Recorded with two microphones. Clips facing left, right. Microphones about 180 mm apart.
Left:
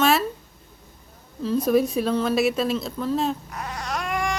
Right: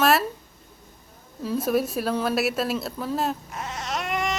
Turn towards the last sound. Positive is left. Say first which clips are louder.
# left 1 dB
turn(degrees=-20)  # may be behind; listen again after turning